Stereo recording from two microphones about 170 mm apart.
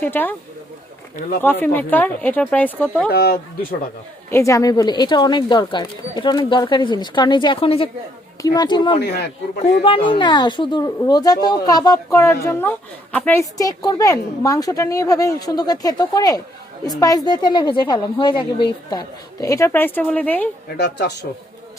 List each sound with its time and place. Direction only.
0.0 s a woman's voice: 10° left (ahead or behind)
1.6 s a woman's voice: 10° left (ahead or behind)
3.1 s speech: 65° left (ahead or behind)
4.3 s speech: 15° left (ahead or behind)
9.0 s speech: 85° left
9.8 s speech: 30° left (ahead or behind); by 13.4 s 10° left (ahead or behind)
13.6 s speech: 20° left (ahead or behind)
20.7 s speech: 80° left